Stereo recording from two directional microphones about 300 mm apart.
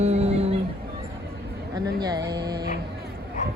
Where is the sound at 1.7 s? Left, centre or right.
Centre.